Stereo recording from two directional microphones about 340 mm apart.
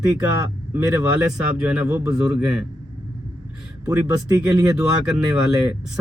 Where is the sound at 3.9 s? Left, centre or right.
Centre.